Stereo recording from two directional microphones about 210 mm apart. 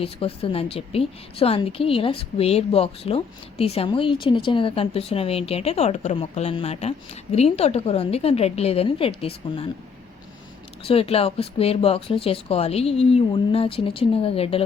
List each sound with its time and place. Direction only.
0.0 s a woman's voice: 25° left (ahead or behind)
10.8 s a woman's voice: 30° left (ahead or behind)